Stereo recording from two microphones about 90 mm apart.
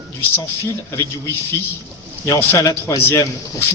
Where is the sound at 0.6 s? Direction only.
35° left (ahead or behind).